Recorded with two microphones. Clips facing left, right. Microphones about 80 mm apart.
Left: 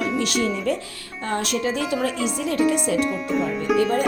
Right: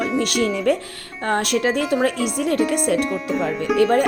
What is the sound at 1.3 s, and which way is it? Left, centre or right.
Speech, right.